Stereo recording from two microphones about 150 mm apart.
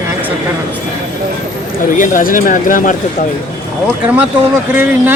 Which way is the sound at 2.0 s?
65° left (ahead or behind).